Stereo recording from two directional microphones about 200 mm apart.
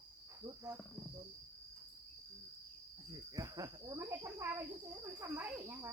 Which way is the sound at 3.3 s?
20° right (ahead or behind).